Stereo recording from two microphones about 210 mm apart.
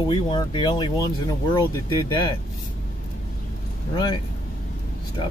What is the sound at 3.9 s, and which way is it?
Speech, 25° left (ahead or behind).